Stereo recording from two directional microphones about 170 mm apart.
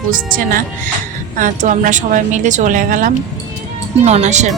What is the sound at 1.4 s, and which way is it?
Speech, 50° right (ahead or behind).